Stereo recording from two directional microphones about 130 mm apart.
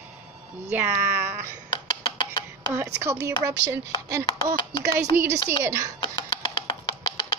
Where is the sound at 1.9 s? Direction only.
35° left (ahead or behind).